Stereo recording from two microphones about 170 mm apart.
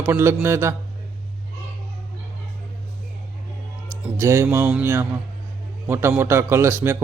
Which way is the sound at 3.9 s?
15° right (ahead or behind).